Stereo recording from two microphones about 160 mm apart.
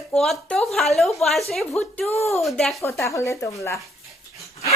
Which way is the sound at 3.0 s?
20° left (ahead or behind).